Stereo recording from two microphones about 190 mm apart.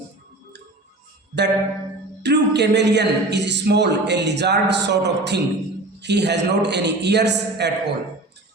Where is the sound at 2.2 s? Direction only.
65° right (ahead or behind).